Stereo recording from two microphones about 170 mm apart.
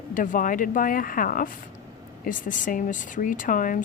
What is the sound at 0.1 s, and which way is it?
Speech, 50° left (ahead or behind).